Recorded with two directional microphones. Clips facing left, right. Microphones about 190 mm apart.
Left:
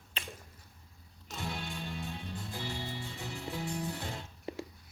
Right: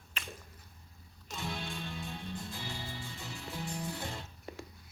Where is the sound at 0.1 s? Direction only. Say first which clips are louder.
Left 2 dB; 30° left (ahead or behind).